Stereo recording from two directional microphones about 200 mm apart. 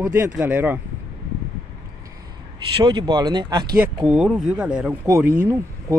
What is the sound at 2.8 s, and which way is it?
Speech, 20° right (ahead or behind).